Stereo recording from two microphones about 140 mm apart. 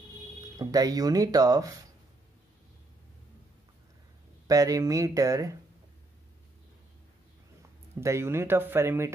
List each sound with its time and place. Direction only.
0.6 s speech: 25° right (ahead or behind)
4.5 s speech: 25° right (ahead or behind)
7.9 s speech: 20° right (ahead or behind)